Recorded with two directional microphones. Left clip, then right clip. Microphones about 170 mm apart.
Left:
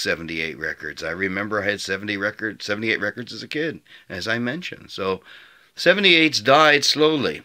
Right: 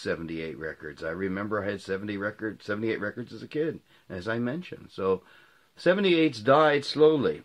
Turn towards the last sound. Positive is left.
turn(degrees=15)  # may be behind; listen again after turning